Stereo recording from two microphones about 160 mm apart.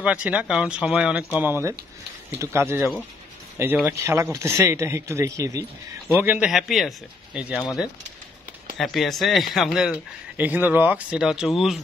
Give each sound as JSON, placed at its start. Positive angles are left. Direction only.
{"t": 0.0, "sound": "a man's voice", "side_deg": -5}
{"t": 1.4, "sound": "a man's voice", "side_deg": -15}
{"t": 3.8, "sound": "a man's voice", "side_deg": -15}
{"t": 8.7, "sound": "speech", "side_deg": 0}